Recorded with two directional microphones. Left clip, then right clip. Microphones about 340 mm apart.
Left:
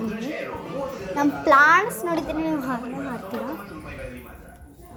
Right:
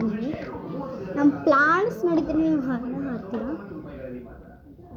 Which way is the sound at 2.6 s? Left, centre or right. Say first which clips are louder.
Even; left.